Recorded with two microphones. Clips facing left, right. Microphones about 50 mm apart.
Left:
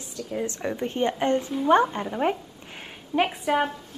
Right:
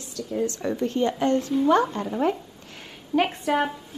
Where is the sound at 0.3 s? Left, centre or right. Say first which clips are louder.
Right 3 dB; left.